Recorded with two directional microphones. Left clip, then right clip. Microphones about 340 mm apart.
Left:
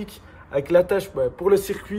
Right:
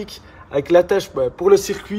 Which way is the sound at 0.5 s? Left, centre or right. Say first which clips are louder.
Right 4 dB; right.